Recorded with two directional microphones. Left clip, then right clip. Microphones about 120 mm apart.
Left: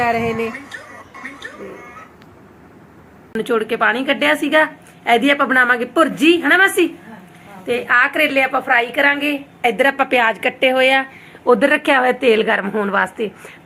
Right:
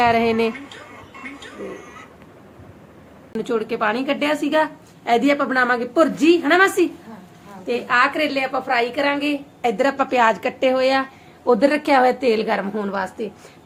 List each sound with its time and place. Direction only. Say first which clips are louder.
0.2 s speech: right 2 dB; 35° right (ahead or behind)
3.4 s a woman's voice: left 5 dB; 10° right (ahead or behind)
4.4 s a woman's voice: left 4 dB; 5° right (ahead or behind)